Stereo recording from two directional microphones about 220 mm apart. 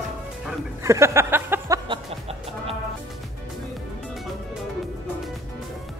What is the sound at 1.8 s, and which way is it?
Music, 25° right (ahead or behind).